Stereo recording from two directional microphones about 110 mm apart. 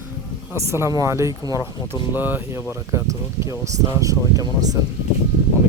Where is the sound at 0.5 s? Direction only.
25° right (ahead or behind).